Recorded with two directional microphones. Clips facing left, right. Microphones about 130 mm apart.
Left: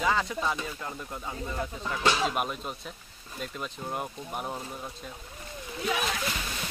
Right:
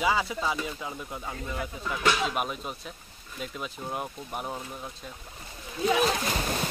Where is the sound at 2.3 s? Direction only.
Centre (ahead or behind).